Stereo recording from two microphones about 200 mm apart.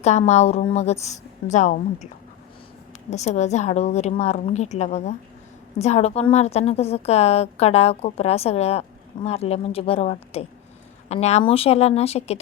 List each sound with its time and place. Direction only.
0.0 s a woman's voice: 35° left (ahead or behind)
3.1 s a woman's voice: 35° left (ahead or behind)